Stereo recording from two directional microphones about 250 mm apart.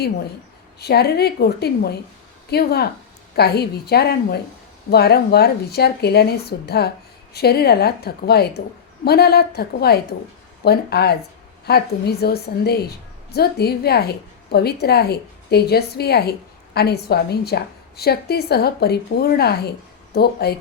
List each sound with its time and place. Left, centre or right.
0.8 s a woman's voice: left